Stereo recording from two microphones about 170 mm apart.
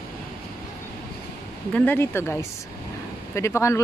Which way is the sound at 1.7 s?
10° left (ahead or behind).